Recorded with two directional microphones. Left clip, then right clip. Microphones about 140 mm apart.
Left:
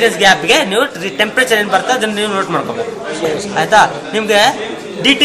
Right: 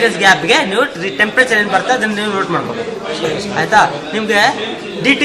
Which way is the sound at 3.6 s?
35° left (ahead or behind).